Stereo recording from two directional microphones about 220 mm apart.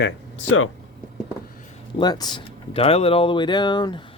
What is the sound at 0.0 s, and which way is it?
Speech, 60° left (ahead or behind).